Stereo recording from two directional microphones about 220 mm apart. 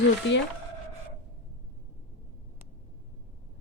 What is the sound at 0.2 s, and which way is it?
Speech, 60° left (ahead or behind).